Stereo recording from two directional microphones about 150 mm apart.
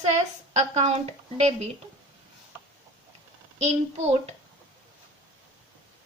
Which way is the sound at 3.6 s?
45° right (ahead or behind).